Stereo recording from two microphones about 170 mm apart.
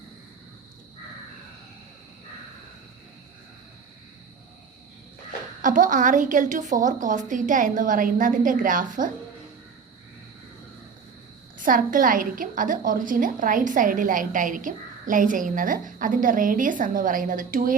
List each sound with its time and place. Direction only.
5.6 s a woman's voice: 50° right (ahead or behind)
11.5 s a woman's voice: 50° right (ahead or behind)